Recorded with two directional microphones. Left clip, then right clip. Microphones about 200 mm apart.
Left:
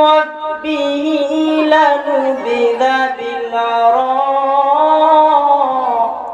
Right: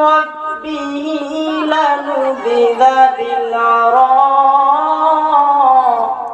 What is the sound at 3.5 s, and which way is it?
Singing, 15° right (ahead or behind).